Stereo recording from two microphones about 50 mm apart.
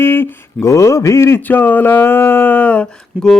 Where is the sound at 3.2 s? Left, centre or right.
Right.